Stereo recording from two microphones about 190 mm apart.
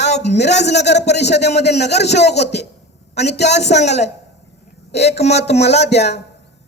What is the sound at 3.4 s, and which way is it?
A woman's voice, 35° left (ahead or behind).